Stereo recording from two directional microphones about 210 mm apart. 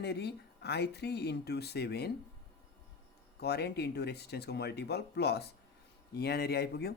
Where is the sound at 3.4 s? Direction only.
50° left (ahead or behind).